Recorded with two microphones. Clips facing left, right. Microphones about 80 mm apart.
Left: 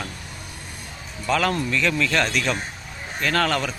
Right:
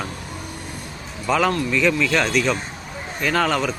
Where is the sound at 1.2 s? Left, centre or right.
Centre.